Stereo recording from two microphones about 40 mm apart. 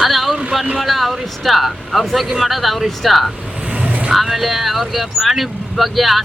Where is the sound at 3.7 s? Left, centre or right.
Right.